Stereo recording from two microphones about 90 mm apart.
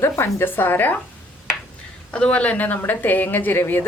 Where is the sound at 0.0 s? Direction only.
25° left (ahead or behind).